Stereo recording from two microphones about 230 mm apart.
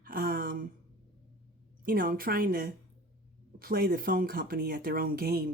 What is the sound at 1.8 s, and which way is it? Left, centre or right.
Speech, right.